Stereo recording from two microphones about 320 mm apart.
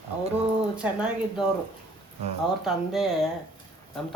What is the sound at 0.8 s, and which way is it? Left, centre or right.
Speech, centre.